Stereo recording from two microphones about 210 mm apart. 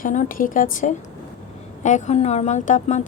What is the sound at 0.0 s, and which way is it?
A woman's voice, 40° left (ahead or behind).